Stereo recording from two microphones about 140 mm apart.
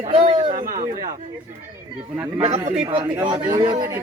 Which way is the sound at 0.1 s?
40° right (ahead or behind).